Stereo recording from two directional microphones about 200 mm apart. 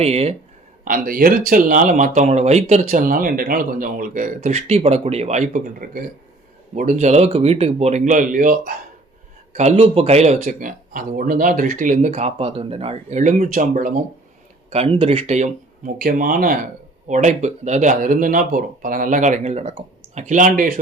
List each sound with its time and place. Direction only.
0.0 s speech: 30° right (ahead or behind)
0.9 s speech: 45° right (ahead or behind)
9.6 s speech: 30° right (ahead or behind)
14.7 s speech: 30° right (ahead or behind)